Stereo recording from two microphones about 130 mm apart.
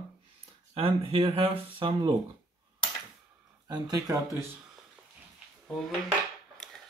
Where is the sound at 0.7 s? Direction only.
45° right (ahead or behind).